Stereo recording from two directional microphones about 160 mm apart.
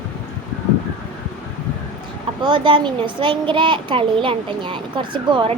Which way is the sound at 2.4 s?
30° right (ahead or behind).